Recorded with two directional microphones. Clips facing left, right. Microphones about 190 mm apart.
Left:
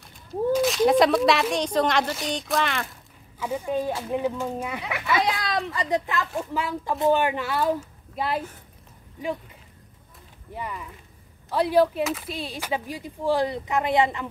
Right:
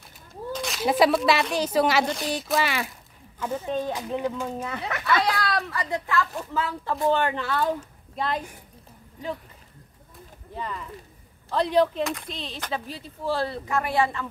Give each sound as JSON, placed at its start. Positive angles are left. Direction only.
{"t": 0.5, "sound": "speech", "side_deg": 0}
{"t": 3.3, "sound": "speech", "side_deg": 10}
{"t": 10.5, "sound": "speech", "side_deg": 10}